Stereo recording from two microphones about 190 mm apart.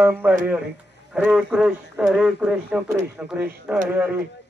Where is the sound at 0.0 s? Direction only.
10° right (ahead or behind).